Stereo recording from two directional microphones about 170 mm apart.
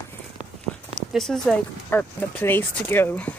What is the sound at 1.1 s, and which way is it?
Speech, 5° left (ahead or behind).